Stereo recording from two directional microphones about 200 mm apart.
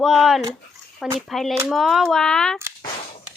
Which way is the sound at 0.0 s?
Centre (ahead or behind).